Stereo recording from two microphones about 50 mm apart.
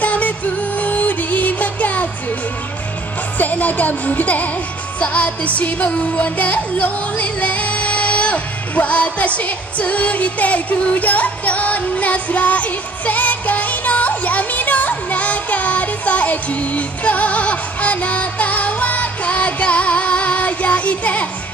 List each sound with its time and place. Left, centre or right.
0.0 s music: left
3.3 s speech: left
5.0 s music: left